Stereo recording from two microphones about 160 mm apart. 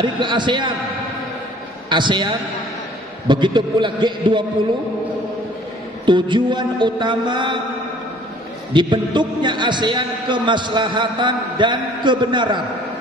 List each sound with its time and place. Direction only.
0.0 s a man's voice: 30° right (ahead or behind)
1.9 s a man's voice: 30° right (ahead or behind)
6.0 s a man's voice: 30° right (ahead or behind)
8.7 s a man's voice: 30° right (ahead or behind)